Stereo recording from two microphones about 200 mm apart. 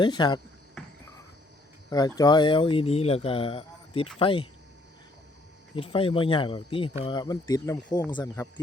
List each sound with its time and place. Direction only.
0.0 s speech: 20° left (ahead or behind)
1.9 s speech: 20° left (ahead or behind)
5.7 s speech: 25° left (ahead or behind)